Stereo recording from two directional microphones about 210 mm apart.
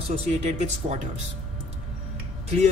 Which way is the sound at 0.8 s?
30° right (ahead or behind).